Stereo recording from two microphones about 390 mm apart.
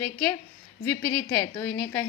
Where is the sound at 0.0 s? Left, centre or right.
Centre.